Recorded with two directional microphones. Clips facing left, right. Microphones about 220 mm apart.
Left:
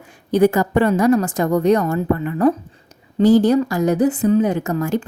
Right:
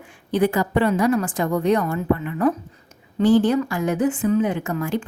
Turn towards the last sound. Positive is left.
turn(degrees=40)  # may be behind; listen again after turning